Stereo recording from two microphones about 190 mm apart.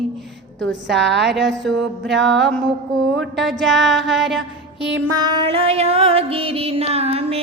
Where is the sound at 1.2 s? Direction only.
Centre (ahead or behind).